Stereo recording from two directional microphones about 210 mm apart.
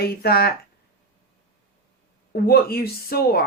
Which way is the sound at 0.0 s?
45° left (ahead or behind).